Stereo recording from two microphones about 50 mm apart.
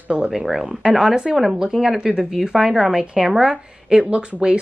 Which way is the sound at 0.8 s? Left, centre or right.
Centre.